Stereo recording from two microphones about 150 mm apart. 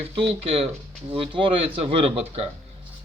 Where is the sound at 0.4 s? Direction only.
40° right (ahead or behind).